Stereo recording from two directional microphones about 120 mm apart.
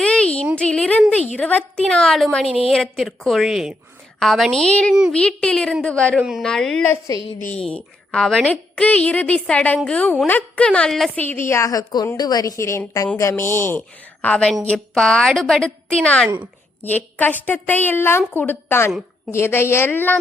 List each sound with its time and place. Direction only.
0.0 s a sound: 10° left (ahead or behind)
1.3 s a woman's voice: 10° left (ahead or behind)
6.1 s a woman's voice: 5° right (ahead or behind)
6.4 s speech: 5° left (ahead or behind)
7.3 s a woman's voice: 90° left
7.6 s a woman's voice: 5° left (ahead or behind)
11.2 s a woman's voice: 20° left (ahead or behind)